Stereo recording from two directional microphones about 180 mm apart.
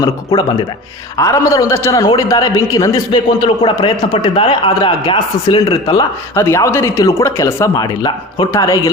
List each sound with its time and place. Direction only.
0.0 s a man's voice: 20° left (ahead or behind)